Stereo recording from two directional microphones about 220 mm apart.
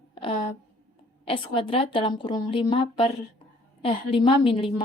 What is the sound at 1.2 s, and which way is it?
A woman's voice, 25° left (ahead or behind).